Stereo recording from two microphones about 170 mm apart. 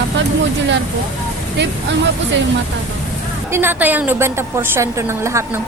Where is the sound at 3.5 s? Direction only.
15° right (ahead or behind).